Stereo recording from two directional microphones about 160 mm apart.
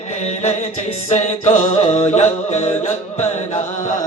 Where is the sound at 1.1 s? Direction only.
45° left (ahead or behind).